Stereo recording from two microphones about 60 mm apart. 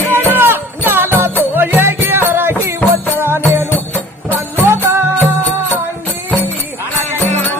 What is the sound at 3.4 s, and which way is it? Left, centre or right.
Music, left.